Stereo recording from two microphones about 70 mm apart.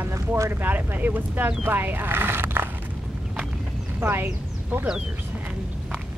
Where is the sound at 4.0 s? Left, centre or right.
Right.